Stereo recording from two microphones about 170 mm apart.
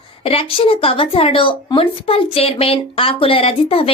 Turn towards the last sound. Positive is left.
turn(degrees=35)  # may be behind; listen again after turning